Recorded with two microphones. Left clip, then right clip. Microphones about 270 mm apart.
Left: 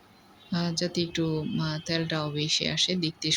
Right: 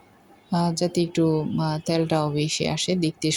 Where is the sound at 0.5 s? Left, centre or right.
Centre.